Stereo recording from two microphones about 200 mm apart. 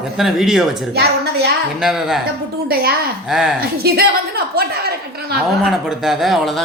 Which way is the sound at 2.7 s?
50° right (ahead or behind).